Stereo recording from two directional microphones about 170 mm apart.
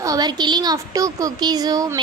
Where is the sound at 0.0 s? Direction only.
20° right (ahead or behind).